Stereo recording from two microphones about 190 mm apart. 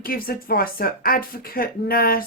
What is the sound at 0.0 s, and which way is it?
Speech, 50° left (ahead or behind).